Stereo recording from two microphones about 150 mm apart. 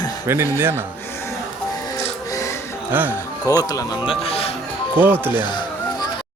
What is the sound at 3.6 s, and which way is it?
Speech, 25° left (ahead or behind).